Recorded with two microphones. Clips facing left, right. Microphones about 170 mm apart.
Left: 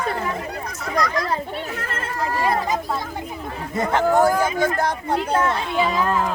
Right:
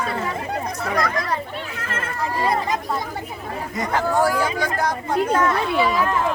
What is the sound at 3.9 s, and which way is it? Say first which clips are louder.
Speech: left 2 dB; 20° left (ahead or behind).